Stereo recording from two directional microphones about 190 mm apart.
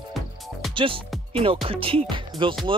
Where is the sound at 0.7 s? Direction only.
25° right (ahead or behind).